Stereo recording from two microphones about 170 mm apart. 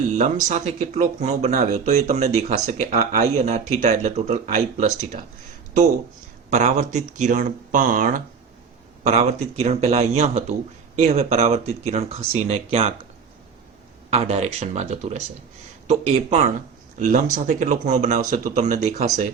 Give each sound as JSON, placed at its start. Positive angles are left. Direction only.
{"t": 0.2, "sound": "speech", "side_deg": -45}
{"t": 6.5, "sound": "speech", "side_deg": -45}
{"t": 9.0, "sound": "speech", "side_deg": -40}
{"t": 14.1, "sound": "speech", "side_deg": -40}
{"t": 17.0, "sound": "speech", "side_deg": -50}